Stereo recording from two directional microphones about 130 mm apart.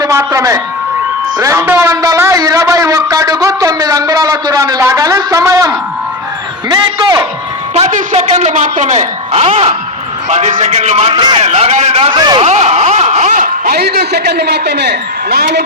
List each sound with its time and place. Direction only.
0.0 s a man's voice: 25° right (ahead or behind)
7.8 s speech: 55° right (ahead or behind)
11.1 s speech: 35° right (ahead or behind)
11.4 s speech: 60° right (ahead or behind)
12.1 s speech: 30° right (ahead or behind)
12.4 s speech: 60° right (ahead or behind); by 13.7 s 80° right